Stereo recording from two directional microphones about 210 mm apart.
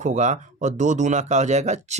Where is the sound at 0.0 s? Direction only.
35° right (ahead or behind).